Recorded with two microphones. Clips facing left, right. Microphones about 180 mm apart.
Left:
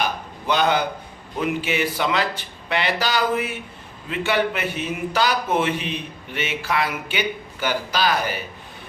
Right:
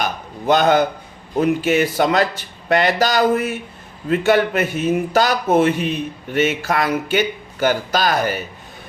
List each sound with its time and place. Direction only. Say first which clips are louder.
0.4 s a man's voice: right 6 dB; 45° right (ahead or behind)